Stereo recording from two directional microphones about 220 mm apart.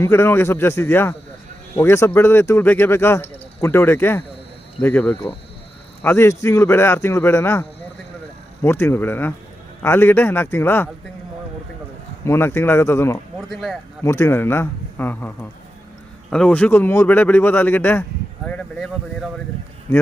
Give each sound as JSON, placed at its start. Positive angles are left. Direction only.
{"t": 0.0, "sound": "speech", "side_deg": 10}
{"t": 8.6, "sound": "speech", "side_deg": 10}
{"t": 12.2, "sound": "speech", "side_deg": 10}
{"t": 13.5, "sound": "speech", "side_deg": 0}
{"t": 14.0, "sound": "speech", "side_deg": 15}